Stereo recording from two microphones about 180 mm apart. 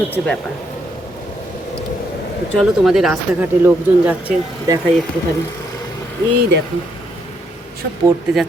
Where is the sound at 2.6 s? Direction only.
Centre (ahead or behind).